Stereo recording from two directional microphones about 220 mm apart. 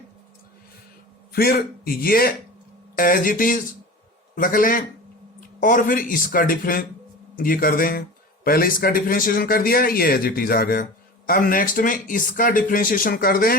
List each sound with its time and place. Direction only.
1.3 s a man's voice: 45° left (ahead or behind)